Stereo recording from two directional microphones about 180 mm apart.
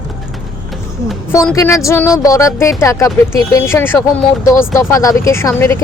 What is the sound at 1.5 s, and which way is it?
A woman's voice, 15° left (ahead or behind).